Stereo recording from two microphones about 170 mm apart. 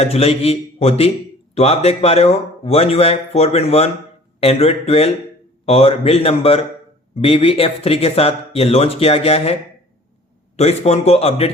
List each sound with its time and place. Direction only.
0.0 s speech: 35° left (ahead or behind)
10.6 s speech: 40° left (ahead or behind)